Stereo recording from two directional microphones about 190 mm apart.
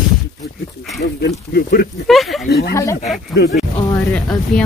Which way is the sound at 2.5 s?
60° left (ahead or behind).